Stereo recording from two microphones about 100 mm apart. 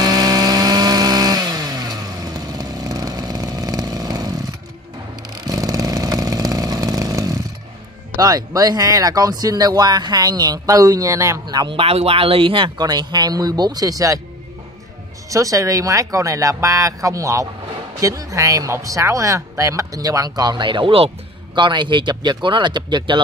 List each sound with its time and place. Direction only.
0.0 s chainsaw: 40° right (ahead or behind)
5.4 s vehicle: 35° right (ahead or behind)
8.2 s speech: 40° right (ahead or behind)
11.4 s speech: 45° right (ahead or behind)
11.7 s speech: 80° right; by 14.2 s 35° right (ahead or behind)
15.2 s speech: 35° right (ahead or behind); by 21.1 s 65° right (ahead or behind)
21.5 s speech: 50° right (ahead or behind)